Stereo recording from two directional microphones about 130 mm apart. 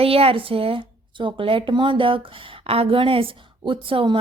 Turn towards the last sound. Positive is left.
turn(degrees=-45)  # may be behind; listen again after turning